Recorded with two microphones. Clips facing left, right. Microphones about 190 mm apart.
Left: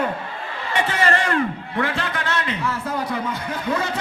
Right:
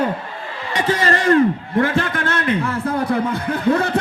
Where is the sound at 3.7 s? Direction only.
60° right (ahead or behind).